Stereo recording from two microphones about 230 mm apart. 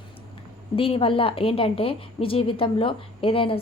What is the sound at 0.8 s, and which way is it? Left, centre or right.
A woman's voice, left.